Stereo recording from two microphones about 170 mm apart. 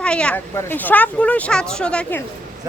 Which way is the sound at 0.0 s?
5° left (ahead or behind).